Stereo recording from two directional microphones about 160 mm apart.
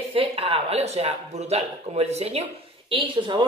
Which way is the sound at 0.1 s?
35° right (ahead or behind).